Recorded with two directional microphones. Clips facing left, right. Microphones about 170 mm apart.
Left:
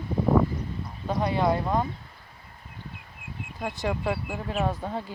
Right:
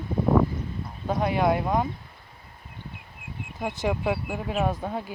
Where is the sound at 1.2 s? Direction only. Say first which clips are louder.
Right 1 dB; 15° right (ahead or behind).